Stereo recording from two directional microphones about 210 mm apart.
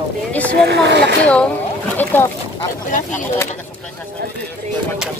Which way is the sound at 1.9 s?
10° left (ahead or behind).